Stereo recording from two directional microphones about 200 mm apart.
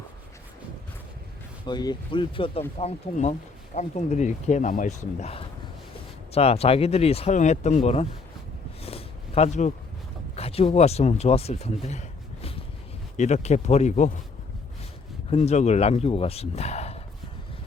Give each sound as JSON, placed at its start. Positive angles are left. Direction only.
{"t": 1.6, "sound": "speech", "side_deg": 20}
{"t": 8.8, "sound": "a sound", "side_deg": 30}
{"t": 10.3, "sound": "speech", "side_deg": 30}
{"t": 15.3, "sound": "speech", "side_deg": 35}